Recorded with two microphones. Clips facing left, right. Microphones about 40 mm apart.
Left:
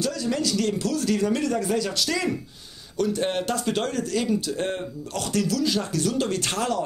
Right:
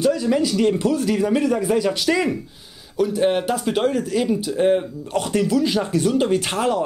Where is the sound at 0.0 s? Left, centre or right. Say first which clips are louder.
Right 7 dB; centre.